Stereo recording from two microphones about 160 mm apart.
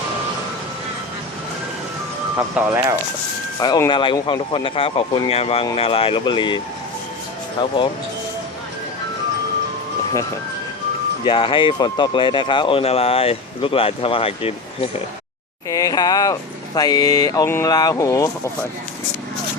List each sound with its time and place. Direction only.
2.6 s speech: 10° right (ahead or behind)
3.6 s speech: 25° left (ahead or behind)
7.6 s speech: 25° left (ahead or behind)
11.3 s speech: 30° left (ahead or behind)
15.7 s speech: 25° left (ahead or behind)